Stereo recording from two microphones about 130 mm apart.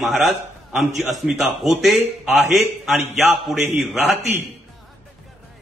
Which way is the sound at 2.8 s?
Centre (ahead or behind).